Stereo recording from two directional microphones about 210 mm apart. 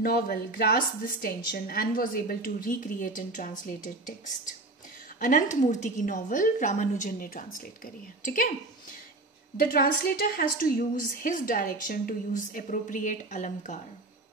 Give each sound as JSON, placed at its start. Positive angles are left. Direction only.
{"t": 0.0, "sound": "a woman's voice", "side_deg": 45}
{"t": 5.2, "sound": "a woman's voice", "side_deg": 35}
{"t": 9.6, "sound": "a woman's voice", "side_deg": 45}